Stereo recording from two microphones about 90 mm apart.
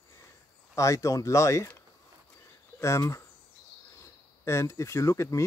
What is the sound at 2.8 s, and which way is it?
Speech, 35° left (ahead or behind).